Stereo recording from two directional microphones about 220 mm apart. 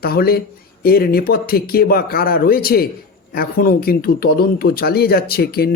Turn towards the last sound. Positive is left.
turn(degrees=45)  # may be behind; listen again after turning